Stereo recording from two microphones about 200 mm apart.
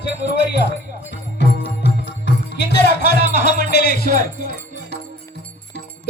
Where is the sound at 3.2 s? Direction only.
55° left (ahead or behind).